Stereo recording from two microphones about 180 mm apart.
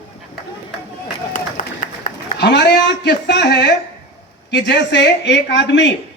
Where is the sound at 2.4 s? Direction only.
70° left (ahead or behind).